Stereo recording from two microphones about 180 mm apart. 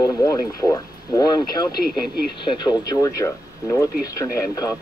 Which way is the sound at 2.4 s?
25° left (ahead or behind).